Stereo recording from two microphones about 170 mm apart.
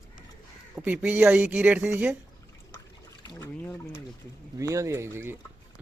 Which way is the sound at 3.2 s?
15° left (ahead or behind).